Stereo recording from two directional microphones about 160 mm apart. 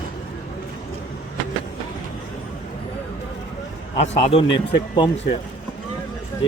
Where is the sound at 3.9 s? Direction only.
40° left (ahead or behind).